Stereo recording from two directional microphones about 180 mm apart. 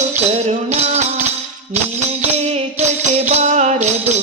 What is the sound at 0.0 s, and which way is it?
Music, 40° right (ahead or behind).